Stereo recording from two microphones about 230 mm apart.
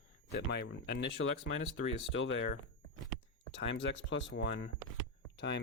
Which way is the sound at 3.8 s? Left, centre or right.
Left.